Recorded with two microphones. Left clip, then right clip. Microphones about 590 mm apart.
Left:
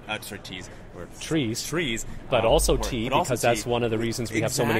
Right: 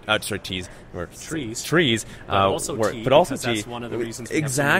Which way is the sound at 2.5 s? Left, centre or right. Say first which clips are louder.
Left 1 dB; left.